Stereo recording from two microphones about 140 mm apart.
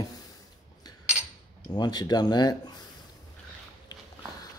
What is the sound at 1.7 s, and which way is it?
Speech, 30° left (ahead or behind).